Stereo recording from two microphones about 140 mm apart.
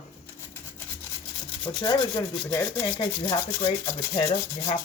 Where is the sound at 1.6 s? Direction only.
30° left (ahead or behind).